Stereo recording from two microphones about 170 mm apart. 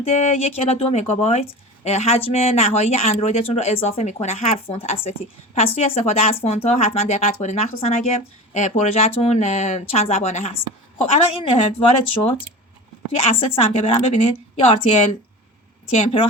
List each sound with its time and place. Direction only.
0.0 s speech: 40° left (ahead or behind)
13.4 s speech: 35° left (ahead or behind)